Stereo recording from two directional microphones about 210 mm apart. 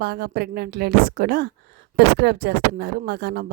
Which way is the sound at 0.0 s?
50° right (ahead or behind).